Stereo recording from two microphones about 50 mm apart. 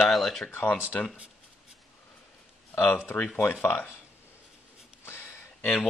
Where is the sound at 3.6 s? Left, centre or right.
Left.